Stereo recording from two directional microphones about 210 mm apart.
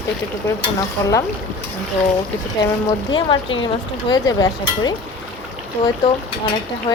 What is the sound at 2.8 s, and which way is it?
A woman's voice, 20° left (ahead or behind).